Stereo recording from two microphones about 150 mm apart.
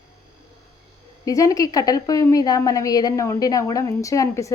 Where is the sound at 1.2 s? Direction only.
25° left (ahead or behind).